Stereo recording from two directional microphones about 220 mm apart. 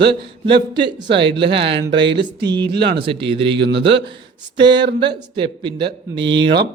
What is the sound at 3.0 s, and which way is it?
Speech, 25° right (ahead or behind).